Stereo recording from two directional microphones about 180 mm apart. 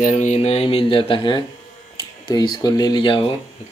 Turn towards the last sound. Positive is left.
turn(degrees=25)  # may be behind; listen again after turning